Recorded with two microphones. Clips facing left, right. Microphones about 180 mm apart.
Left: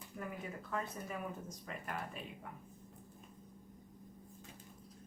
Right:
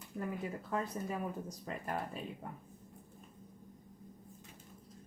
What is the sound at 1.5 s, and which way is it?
Speech, 30° right (ahead or behind).